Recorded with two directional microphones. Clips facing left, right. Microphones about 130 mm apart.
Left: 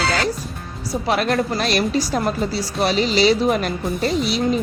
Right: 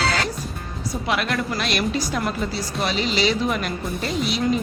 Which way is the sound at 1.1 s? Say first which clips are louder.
Left 5 dB; 35° left (ahead or behind).